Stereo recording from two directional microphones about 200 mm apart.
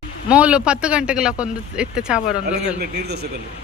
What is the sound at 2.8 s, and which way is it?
Speech, 55° right (ahead or behind).